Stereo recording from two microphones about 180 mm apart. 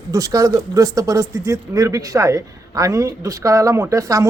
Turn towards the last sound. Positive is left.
turn(degrees=-15)  # may be behind; listen again after turning